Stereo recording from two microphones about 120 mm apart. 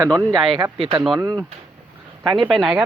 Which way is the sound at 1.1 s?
30° right (ahead or behind).